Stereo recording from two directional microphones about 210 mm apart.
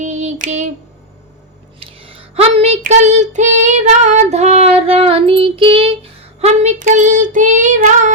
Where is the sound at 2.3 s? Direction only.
30° right (ahead or behind).